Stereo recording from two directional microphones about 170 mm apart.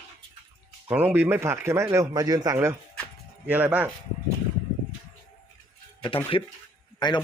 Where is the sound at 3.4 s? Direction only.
10° right (ahead or behind).